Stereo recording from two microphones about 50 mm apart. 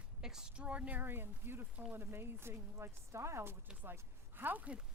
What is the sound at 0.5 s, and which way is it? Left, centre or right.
Speech, right.